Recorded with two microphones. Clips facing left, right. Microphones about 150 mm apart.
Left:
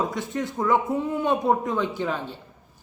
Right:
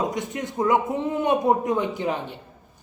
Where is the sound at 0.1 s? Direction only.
20° right (ahead or behind).